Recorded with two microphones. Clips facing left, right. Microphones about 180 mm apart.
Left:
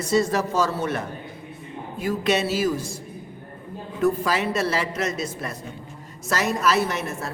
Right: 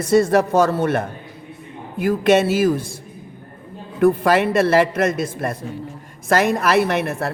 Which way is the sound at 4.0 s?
55° right (ahead or behind).